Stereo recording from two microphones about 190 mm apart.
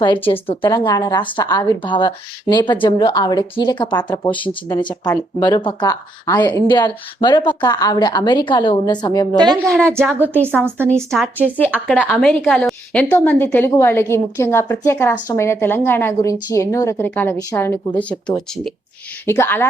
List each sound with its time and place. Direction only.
0.3 s a woman's voice: 25° left (ahead or behind)
9.4 s a woman's voice: 20° right (ahead or behind)
11.4 s a woman's voice: 10° left (ahead or behind)